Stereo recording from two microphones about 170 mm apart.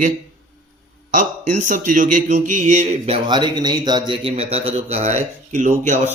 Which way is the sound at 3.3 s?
25° right (ahead or behind).